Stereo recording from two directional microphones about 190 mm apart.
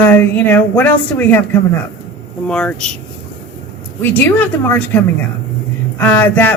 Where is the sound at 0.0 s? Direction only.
10° left (ahead or behind).